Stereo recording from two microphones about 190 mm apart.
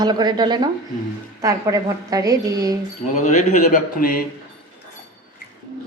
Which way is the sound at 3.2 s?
45° left (ahead or behind).